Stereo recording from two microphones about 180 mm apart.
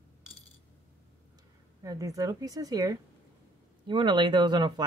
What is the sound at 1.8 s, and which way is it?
A woman's voice, 20° right (ahead or behind).